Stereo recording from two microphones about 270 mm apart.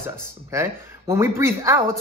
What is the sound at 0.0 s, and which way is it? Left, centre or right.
Speech, centre.